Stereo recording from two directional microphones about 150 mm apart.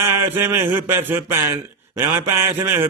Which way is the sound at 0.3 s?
15° right (ahead or behind).